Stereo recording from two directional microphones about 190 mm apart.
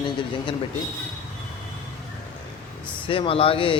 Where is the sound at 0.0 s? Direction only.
25° left (ahead or behind).